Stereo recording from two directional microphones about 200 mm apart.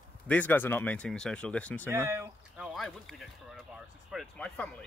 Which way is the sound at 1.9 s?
15° right (ahead or behind).